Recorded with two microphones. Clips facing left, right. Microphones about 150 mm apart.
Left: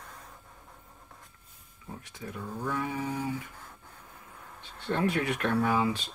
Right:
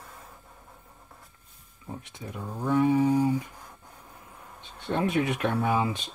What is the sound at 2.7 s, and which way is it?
Mantra, 30° right (ahead or behind).